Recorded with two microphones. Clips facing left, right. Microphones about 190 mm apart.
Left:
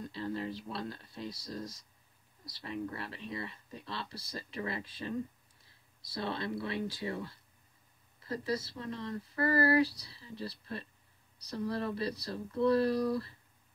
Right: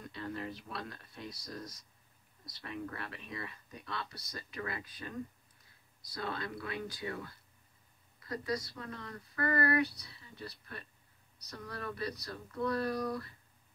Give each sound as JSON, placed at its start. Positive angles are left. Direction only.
{"t": 0.0, "sound": "speech", "side_deg": 30}
{"t": 6.1, "sound": "speech", "side_deg": 25}